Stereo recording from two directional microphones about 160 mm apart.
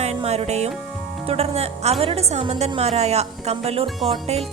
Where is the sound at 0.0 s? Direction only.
40° right (ahead or behind).